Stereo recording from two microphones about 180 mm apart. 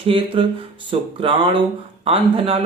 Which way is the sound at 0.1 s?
30° right (ahead or behind).